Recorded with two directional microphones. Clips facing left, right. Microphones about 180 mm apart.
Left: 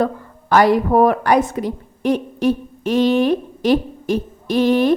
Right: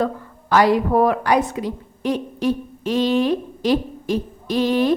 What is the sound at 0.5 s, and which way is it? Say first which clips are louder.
A woman's voice: left 2 dB; 55° left (ahead or behind).